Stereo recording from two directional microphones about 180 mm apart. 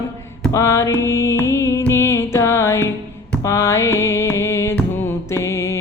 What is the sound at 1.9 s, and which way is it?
Music, 15° left (ahead or behind).